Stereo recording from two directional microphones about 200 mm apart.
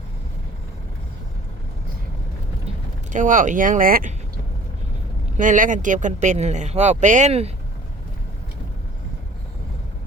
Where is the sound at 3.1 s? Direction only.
40° right (ahead or behind).